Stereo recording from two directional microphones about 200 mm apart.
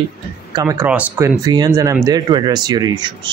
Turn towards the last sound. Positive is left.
turn(degrees=-20)  # may be behind; listen again after turning